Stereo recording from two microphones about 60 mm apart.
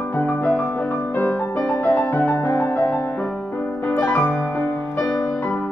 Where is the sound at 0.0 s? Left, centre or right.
Left.